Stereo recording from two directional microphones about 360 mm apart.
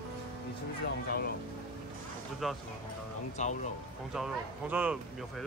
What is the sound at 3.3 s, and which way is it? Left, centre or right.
Speech, centre.